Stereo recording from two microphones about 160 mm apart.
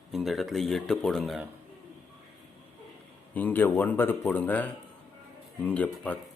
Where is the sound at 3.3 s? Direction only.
10° left (ahead or behind).